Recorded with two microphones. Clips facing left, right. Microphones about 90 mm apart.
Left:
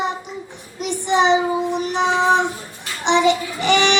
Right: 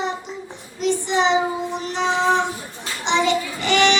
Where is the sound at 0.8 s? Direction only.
15° left (ahead or behind).